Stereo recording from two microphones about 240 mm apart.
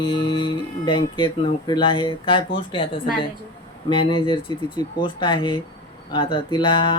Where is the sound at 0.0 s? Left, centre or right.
Left.